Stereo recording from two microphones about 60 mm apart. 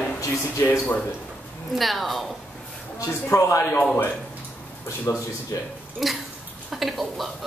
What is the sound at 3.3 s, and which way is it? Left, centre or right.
Speech, left.